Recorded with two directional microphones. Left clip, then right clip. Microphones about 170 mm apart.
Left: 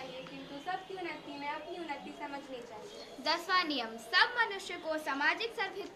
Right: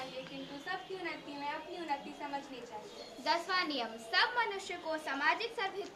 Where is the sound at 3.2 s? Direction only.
60° left (ahead or behind).